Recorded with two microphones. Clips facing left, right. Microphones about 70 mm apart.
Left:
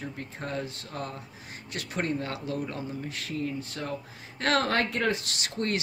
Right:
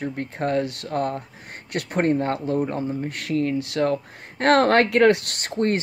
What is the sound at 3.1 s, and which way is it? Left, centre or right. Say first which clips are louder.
Speech: right 10 dB; right.